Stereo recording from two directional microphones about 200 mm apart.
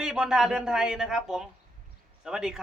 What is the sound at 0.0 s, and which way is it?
Speech, 5° right (ahead or behind).